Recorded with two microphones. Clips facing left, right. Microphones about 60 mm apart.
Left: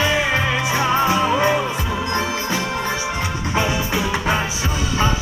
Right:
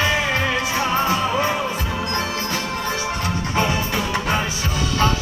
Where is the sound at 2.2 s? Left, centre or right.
Left.